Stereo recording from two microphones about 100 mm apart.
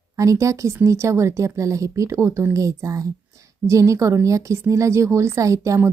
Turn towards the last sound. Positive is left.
turn(degrees=-30)  # may be behind; listen again after turning